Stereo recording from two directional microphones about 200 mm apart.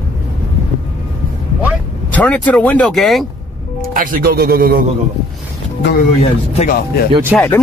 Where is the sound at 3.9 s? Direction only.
45° right (ahead or behind).